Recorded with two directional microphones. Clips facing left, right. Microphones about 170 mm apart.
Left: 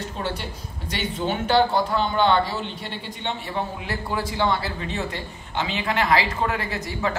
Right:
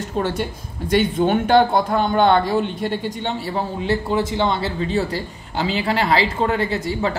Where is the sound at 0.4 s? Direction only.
50° right (ahead or behind).